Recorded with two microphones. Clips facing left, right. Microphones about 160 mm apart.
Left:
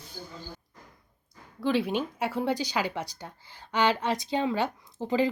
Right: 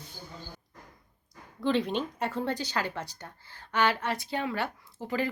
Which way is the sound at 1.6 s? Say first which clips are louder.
Left 1 dB; 5° left (ahead or behind).